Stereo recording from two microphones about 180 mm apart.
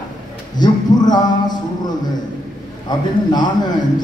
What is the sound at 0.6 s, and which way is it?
A man's voice, 25° left (ahead or behind).